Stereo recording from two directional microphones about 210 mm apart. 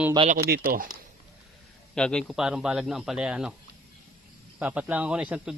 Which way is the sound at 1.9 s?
5° left (ahead or behind).